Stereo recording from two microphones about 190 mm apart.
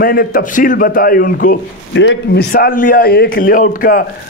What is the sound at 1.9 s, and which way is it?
A man's voice, 70° left (ahead or behind).